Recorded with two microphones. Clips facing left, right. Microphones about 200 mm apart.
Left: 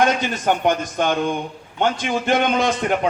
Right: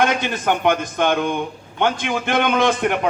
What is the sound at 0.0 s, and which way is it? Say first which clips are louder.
A man's voice: left 1 dB; 55° right (ahead or behind).